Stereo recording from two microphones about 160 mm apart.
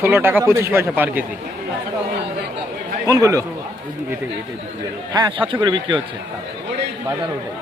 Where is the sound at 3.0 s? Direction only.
20° right (ahead or behind).